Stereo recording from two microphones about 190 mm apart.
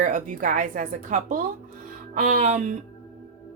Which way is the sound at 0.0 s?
45° right (ahead or behind).